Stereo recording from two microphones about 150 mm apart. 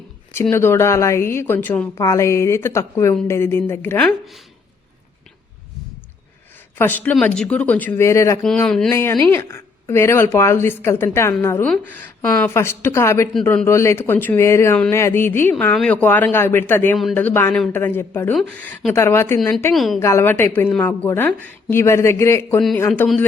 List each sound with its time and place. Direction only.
0.5 s a woman's voice: 15° left (ahead or behind)
6.7 s a woman's voice: 10° left (ahead or behind)
8.5 s speech: 5° left (ahead or behind)
8.9 s a woman's voice: 15° left (ahead or behind)
19.7 s speech: centre (ahead or behind)
20.0 s a woman's voice: 15° left (ahead or behind)